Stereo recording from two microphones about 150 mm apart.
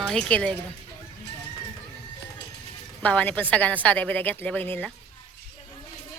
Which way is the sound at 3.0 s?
10° left (ahead or behind).